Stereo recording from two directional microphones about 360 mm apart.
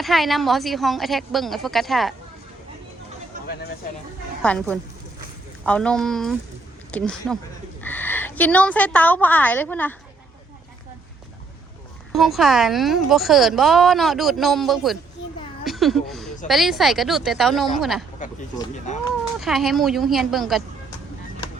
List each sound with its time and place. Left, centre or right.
0.0 s a woman's voice: centre
3.3 s a sound: right
4.4 s a woman's voice: centre
12.1 s a woman's voice: centre
15.6 s a sound: centre
16.5 s a woman's voice: centre
18.2 s speech: left
19.4 s a woman's voice: centre